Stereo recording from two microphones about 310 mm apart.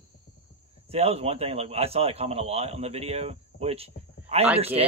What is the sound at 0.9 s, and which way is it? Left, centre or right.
A man's voice, centre.